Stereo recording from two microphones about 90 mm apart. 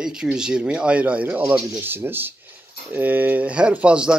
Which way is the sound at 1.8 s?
25° right (ahead or behind).